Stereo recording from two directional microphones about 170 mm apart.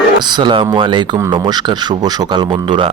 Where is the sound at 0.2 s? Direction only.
25° right (ahead or behind).